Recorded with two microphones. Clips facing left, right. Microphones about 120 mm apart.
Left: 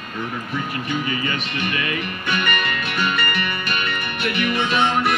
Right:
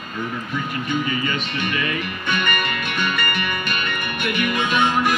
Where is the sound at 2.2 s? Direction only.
40° left (ahead or behind).